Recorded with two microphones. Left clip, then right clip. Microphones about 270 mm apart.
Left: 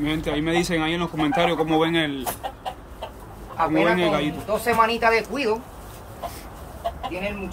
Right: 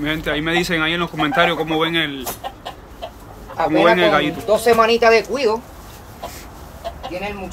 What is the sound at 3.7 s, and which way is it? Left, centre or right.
Speech, centre.